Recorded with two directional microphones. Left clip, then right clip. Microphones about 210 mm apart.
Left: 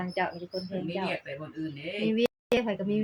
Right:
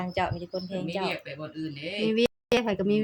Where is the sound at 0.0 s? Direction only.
35° right (ahead or behind).